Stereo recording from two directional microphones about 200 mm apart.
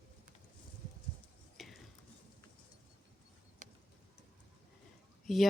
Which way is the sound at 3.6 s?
40° right (ahead or behind).